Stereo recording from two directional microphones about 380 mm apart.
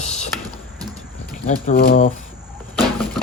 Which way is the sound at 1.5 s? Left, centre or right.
Left.